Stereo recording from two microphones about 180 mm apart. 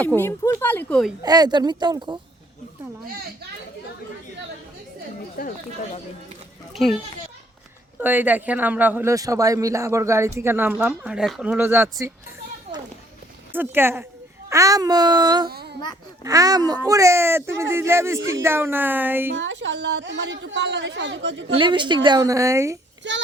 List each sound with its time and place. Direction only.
0.2 s speech: 15° left (ahead or behind)
1.2 s a woman's voice: 20° right (ahead or behind)
6.8 s a child's voice: centre (ahead or behind)
12.7 s children playing: 30° right (ahead or behind)
13.5 s a man's voice: 10° right (ahead or behind)
15.4 s speech: 60° right (ahead or behind)
16.2 s a man's voice: 20° right (ahead or behind)
19.3 s speech: 90° right
21.5 s a woman's voice: 25° right (ahead or behind)
23.1 s speech: 85° right